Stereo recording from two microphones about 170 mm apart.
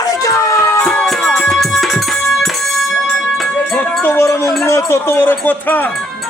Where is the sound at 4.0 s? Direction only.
15° left (ahead or behind).